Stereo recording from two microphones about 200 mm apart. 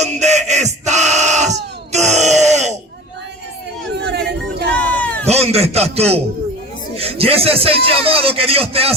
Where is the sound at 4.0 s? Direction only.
55° right (ahead or behind).